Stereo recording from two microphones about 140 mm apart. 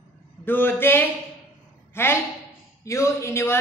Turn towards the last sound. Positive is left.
turn(degrees=20)  # may be behind; listen again after turning